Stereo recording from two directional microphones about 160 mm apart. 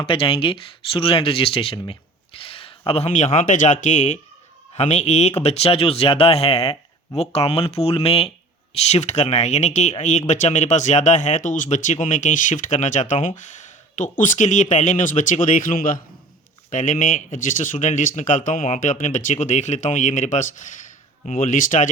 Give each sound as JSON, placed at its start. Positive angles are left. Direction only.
{"t": 0.0, "sound": "speech", "side_deg": 35}